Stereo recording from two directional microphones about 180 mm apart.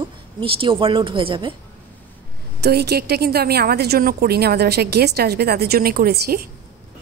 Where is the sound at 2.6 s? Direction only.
65° right (ahead or behind).